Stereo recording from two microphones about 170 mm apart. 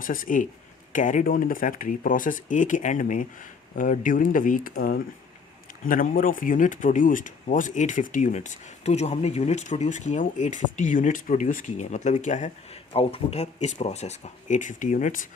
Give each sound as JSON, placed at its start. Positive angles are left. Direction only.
{"t": 0.0, "sound": "speech", "side_deg": 55}
{"t": 12.9, "sound": "speech", "side_deg": 35}